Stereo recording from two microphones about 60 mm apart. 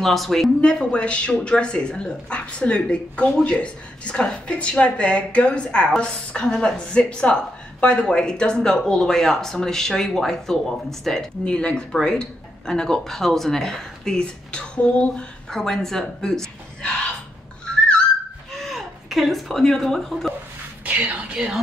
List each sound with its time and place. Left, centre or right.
0.0 s speech: centre
0.6 s speech: centre
11.4 s speech: centre
15.5 s speech: centre
17.6 s a sound: centre
18.6 s speech: centre
20.8 s speech: right